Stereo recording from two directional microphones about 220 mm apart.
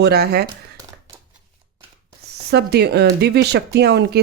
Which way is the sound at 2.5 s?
45° right (ahead or behind).